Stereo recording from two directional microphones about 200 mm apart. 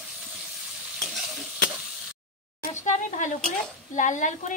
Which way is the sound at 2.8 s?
40° left (ahead or behind).